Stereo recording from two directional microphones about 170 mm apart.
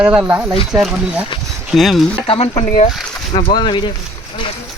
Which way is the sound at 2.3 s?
35° left (ahead or behind).